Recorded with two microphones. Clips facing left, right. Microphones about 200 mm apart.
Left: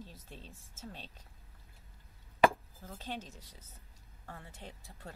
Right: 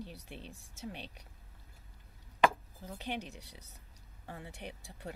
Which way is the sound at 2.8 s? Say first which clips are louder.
Right 3 dB; 15° right (ahead or behind).